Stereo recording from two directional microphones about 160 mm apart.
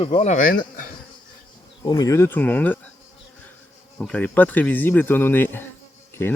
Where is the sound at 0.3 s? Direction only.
60° left (ahead or behind).